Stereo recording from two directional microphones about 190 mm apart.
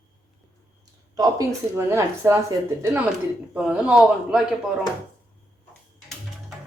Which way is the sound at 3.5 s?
5° right (ahead or behind).